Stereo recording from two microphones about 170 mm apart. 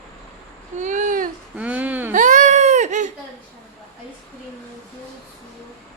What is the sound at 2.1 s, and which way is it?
Baby cry, 50° right (ahead or behind).